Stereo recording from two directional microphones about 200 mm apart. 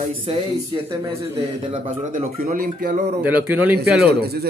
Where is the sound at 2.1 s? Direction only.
45° right (ahead or behind).